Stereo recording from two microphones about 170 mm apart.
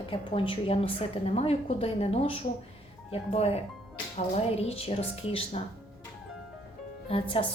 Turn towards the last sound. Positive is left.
turn(degrees=30)  # may be behind; listen again after turning